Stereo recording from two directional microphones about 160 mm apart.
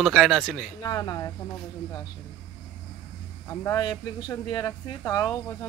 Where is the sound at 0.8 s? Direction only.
25° left (ahead or behind).